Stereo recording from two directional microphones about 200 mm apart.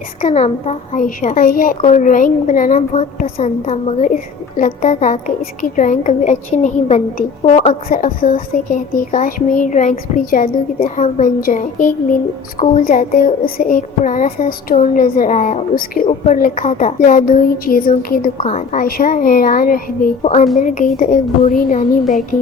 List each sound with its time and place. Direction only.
0.2 s a woman's voice: 35° left (ahead or behind)
18.3 s a child's voice: 35° left (ahead or behind)